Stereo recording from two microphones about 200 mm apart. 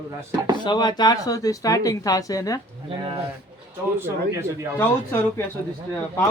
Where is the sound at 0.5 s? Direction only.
20° left (ahead or behind).